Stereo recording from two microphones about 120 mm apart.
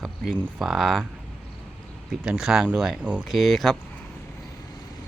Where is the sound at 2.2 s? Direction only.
5° right (ahead or behind).